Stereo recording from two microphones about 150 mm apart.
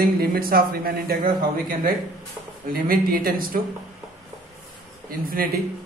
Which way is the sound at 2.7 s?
75° right (ahead or behind).